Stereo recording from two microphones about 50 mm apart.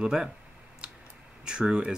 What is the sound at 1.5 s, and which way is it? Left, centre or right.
Speech, centre.